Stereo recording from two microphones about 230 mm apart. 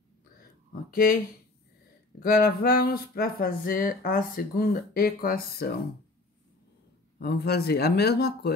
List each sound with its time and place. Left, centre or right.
0.8 s speech: left
7.2 s speech: left